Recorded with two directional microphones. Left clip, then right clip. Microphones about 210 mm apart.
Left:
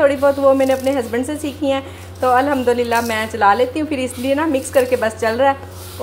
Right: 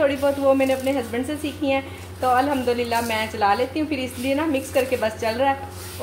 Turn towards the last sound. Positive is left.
turn(degrees=20)  # may be behind; listen again after turning